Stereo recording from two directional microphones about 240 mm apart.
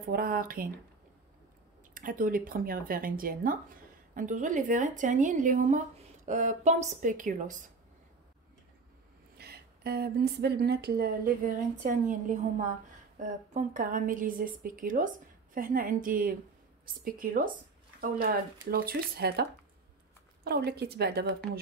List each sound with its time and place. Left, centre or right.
0.1 s a woman's voice: right
2.0 s a woman's voice: right
9.4 s a woman's voice: right
20.4 s a woman's voice: right